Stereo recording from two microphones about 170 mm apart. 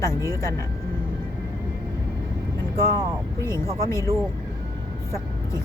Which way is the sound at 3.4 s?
15° left (ahead or behind).